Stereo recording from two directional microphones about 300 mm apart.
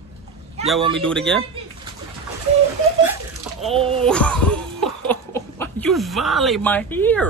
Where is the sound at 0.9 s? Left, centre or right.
Centre.